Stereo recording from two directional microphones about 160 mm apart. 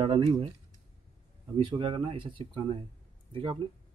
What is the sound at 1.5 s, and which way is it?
Speech, 30° right (ahead or behind).